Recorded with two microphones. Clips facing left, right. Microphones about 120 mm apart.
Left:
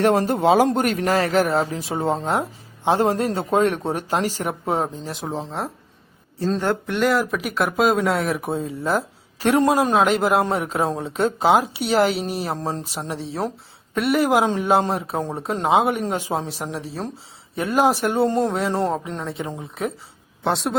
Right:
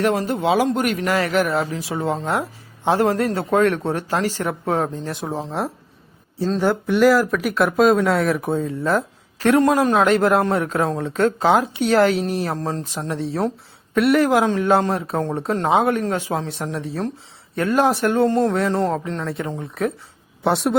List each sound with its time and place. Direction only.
0.2 s speech: 45° left (ahead or behind)
2.1 s speech: 20° left (ahead or behind)
4.9 s speech: centre (ahead or behind)
9.5 s speech: 15° left (ahead or behind)
14.2 s speech: 10° left (ahead or behind)
16.7 s speech: 5° left (ahead or behind)
17.6 s speech: 15° left (ahead or behind)
19.2 s speech: centre (ahead or behind)